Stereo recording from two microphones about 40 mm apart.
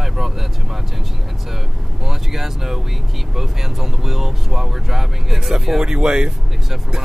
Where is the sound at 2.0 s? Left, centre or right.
Centre.